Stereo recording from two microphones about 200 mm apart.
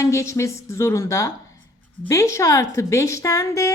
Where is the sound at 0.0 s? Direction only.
15° left (ahead or behind).